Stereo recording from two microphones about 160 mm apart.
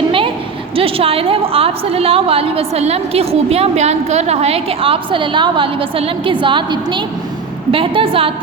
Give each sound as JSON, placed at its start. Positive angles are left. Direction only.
{"t": 0.8, "sound": "a woman's voice", "side_deg": -35}